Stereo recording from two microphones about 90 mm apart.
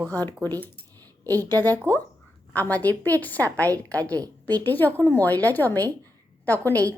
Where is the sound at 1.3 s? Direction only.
25° left (ahead or behind).